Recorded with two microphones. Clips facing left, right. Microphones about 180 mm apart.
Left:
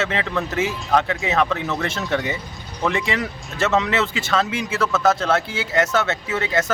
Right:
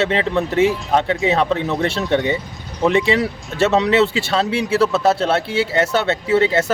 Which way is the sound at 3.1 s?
35° right (ahead or behind).